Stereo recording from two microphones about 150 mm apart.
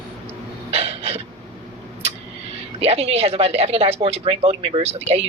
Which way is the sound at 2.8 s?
45° right (ahead or behind).